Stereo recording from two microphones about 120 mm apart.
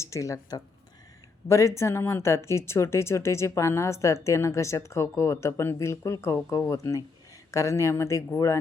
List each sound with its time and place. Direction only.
0.0 s a woman's voice: 25° left (ahead or behind)